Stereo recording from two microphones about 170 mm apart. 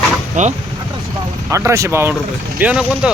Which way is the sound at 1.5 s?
15° right (ahead or behind).